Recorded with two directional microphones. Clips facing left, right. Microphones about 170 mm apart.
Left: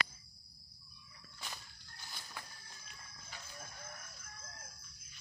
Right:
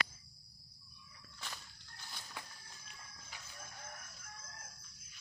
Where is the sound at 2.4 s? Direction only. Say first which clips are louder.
Right 1 dB; 20° right (ahead or behind).